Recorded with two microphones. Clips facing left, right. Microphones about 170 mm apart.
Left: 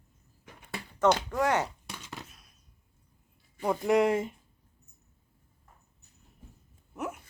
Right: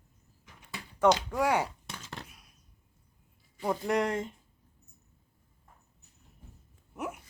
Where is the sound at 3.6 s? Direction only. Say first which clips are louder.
Left 4 dB; 5° left (ahead or behind).